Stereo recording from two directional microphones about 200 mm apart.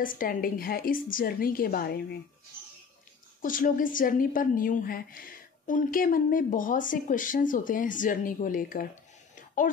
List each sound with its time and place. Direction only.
0.0 s a woman's voice: 45° left (ahead or behind)
3.4 s a woman's voice: 40° left (ahead or behind)